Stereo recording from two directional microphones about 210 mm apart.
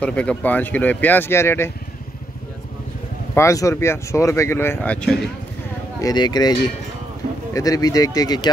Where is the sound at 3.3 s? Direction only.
15° left (ahead or behind).